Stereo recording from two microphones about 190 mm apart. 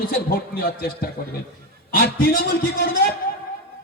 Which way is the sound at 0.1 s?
55° left (ahead or behind).